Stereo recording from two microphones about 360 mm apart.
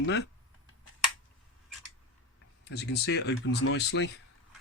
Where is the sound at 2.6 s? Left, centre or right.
Left.